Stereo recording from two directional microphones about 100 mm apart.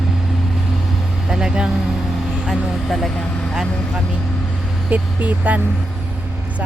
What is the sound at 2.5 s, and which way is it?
Speech, 5° left (ahead or behind).